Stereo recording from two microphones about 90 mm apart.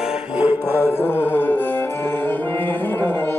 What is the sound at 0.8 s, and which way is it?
Music, 20° left (ahead or behind).